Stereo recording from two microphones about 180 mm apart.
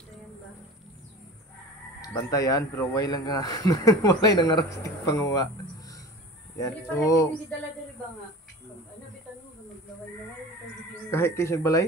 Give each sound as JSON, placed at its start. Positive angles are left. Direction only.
{"t": 2.0, "sound": "a man's voice", "side_deg": 20}
{"t": 6.6, "sound": "a man's voice", "side_deg": 15}
{"t": 11.1, "sound": "a man's voice", "side_deg": 15}